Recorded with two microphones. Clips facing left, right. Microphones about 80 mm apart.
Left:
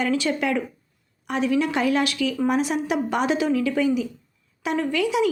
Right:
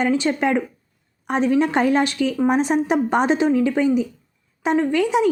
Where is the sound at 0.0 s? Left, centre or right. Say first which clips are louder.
Right 4 dB; right.